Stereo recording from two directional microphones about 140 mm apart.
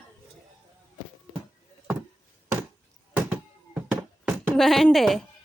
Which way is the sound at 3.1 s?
10° right (ahead or behind).